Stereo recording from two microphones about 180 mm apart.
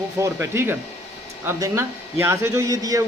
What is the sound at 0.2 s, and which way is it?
A man's voice, 15° right (ahead or behind).